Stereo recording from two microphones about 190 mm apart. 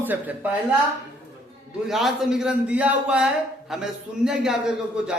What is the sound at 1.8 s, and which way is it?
A man's voice, centre (ahead or behind).